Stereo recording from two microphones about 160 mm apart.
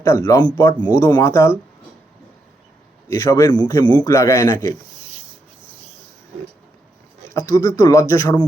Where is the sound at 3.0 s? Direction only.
20° left (ahead or behind).